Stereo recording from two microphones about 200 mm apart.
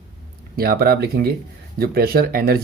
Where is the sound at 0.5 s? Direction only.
50° right (ahead or behind).